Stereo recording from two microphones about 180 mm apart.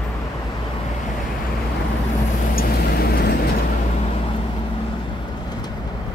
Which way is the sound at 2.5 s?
60° left (ahead or behind).